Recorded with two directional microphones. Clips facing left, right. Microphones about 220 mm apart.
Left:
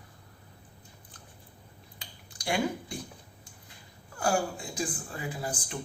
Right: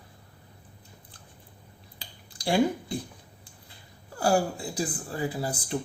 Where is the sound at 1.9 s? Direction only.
30° right (ahead or behind).